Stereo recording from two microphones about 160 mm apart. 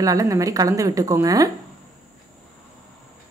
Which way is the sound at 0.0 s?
20° right (ahead or behind).